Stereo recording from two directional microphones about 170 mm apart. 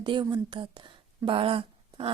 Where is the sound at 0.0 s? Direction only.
25° right (ahead or behind).